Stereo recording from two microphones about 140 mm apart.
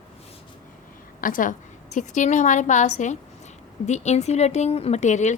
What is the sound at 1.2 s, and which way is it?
A woman's voice, 75° left (ahead or behind).